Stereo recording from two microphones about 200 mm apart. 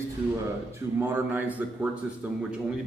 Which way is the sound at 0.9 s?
10° right (ahead or behind).